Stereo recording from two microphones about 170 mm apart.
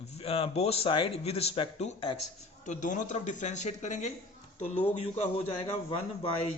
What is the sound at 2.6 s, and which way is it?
A man's voice, 45° left (ahead or behind).